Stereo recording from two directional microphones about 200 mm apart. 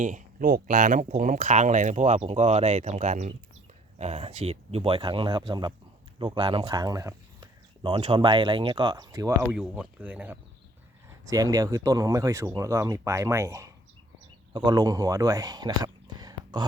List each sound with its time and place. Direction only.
0.0 s speech: 40° right (ahead or behind); by 9.3 s 15° right (ahead or behind)
9.4 s speech: 5° right (ahead or behind); by 16.6 s 20° right (ahead or behind)